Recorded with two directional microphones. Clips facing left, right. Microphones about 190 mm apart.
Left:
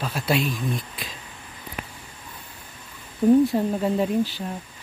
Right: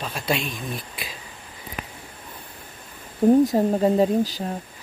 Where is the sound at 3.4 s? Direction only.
40° right (ahead or behind).